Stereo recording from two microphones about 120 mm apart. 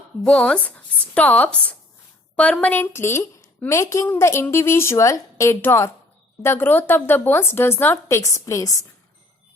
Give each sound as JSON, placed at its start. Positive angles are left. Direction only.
{"t": 0.3, "sound": "a woman's voice", "side_deg": 10}